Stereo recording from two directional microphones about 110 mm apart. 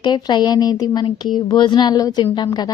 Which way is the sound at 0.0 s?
40° left (ahead or behind).